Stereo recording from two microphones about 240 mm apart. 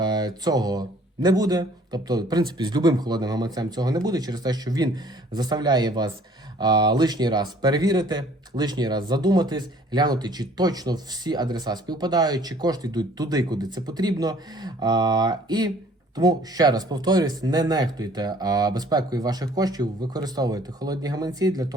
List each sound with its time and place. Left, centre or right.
0.0 s speech: centre